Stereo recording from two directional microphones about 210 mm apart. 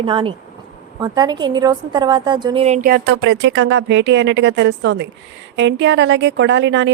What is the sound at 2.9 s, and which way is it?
Speech, 65° right (ahead or behind).